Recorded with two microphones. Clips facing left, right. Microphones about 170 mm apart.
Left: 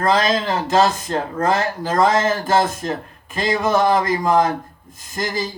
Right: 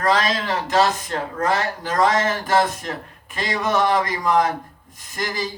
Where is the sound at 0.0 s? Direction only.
30° left (ahead or behind).